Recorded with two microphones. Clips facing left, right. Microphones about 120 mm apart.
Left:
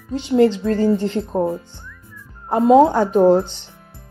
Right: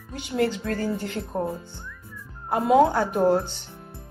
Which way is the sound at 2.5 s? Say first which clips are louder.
Left 6 dB; 25° left (ahead or behind).